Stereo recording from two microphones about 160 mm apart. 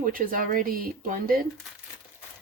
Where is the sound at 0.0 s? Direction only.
60° right (ahead or behind).